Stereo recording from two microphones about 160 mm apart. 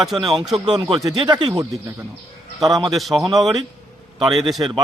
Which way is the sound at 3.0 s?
Centre (ahead or behind).